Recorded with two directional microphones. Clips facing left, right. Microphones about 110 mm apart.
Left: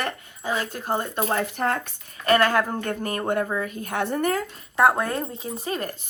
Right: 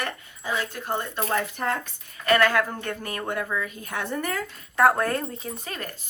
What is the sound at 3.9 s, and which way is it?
Speech, 60° left (ahead or behind).